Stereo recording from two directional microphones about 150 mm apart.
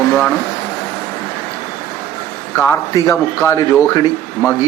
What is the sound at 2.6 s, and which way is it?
Speech, 15° left (ahead or behind).